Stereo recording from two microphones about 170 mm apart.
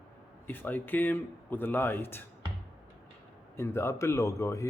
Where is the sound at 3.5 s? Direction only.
15° left (ahead or behind).